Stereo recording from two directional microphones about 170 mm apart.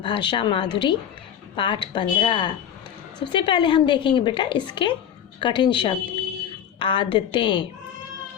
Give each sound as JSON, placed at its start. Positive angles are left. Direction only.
{"t": 0.0, "sound": "a woman's voice", "side_deg": 25}